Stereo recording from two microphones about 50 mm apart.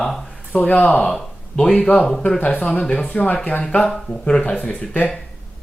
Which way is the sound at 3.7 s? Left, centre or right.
Centre.